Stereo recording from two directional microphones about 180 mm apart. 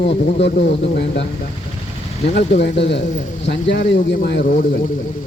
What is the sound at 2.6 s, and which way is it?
Speech, 70° left (ahead or behind).